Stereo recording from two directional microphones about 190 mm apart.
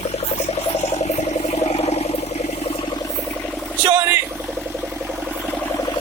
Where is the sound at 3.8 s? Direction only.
10° right (ahead or behind).